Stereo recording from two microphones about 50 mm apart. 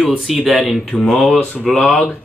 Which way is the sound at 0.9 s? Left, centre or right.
Centre.